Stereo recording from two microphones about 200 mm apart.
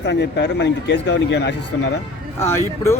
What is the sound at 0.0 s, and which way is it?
A man's voice, 60° left (ahead or behind).